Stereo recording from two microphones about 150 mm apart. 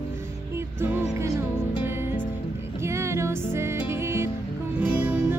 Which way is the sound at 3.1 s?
20° right (ahead or behind).